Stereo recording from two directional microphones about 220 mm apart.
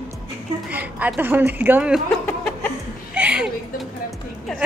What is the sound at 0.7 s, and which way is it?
A woman's voice, 5° right (ahead or behind).